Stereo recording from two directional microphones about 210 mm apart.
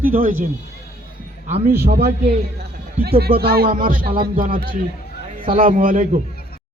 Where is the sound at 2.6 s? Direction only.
50° right (ahead or behind).